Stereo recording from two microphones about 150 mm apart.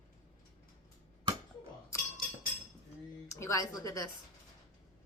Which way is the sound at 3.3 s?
20° left (ahead or behind).